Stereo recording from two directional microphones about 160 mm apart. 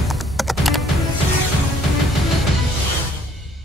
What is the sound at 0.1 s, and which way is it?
Computer keyboard, centre (ahead or behind).